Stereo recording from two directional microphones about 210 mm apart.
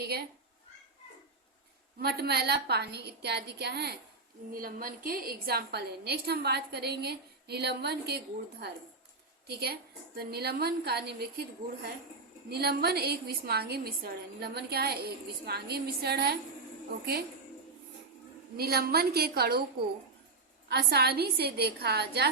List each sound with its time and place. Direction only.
0.0 s speech: 50° right (ahead or behind)
2.0 s a woman's voice: 50° right (ahead or behind)
9.5 s a woman's voice: 50° right (ahead or behind)
18.5 s a woman's voice: 45° right (ahead or behind)
20.7 s a woman's voice: 50° right (ahead or behind)